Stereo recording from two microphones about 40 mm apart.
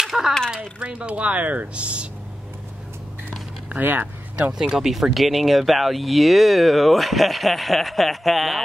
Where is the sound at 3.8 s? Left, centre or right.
Right.